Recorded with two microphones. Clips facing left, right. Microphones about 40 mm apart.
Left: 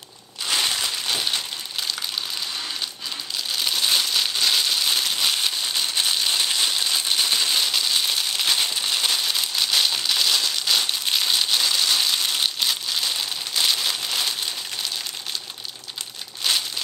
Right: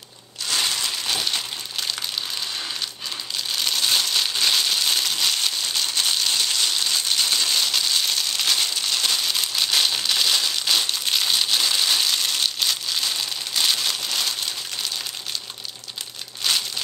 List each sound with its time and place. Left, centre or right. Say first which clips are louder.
0.7 s crumpling: even; centre
3.5 s crumpling: even; centre
16.5 s crumpling: even; centre